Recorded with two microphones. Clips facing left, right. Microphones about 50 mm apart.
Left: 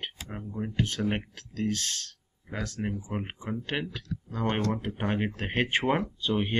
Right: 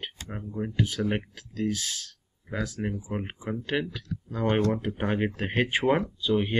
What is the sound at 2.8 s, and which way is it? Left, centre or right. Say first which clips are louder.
Speech: right 1 dB; centre.